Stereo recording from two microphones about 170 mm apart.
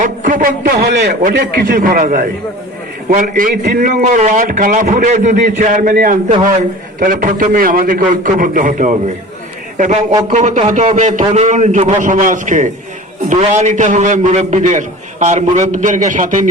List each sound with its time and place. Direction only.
0.0 s a man's voice: 50° right (ahead or behind)
0.8 s a man's voice: 80° right; by 16.5 s 50° right (ahead or behind)